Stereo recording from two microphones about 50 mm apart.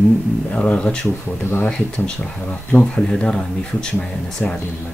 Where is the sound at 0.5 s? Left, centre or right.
Left.